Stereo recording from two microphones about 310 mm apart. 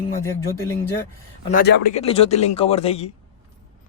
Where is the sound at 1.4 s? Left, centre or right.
Left.